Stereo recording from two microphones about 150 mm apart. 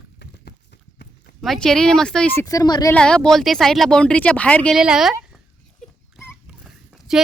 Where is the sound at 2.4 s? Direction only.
25° left (ahead or behind).